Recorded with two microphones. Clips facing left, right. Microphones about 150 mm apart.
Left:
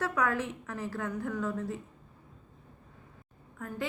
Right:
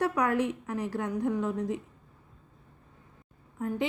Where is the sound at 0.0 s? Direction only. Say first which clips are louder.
Right 4 dB; 15° right (ahead or behind).